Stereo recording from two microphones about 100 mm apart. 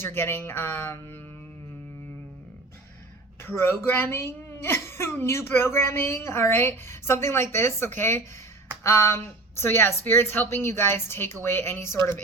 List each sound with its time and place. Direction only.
0.0 s a woman's voice: 25° left (ahead or behind)
3.4 s a woman's voice: 25° left (ahead or behind)